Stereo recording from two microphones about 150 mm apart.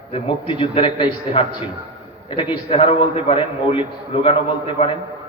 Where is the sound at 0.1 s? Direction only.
35° left (ahead or behind).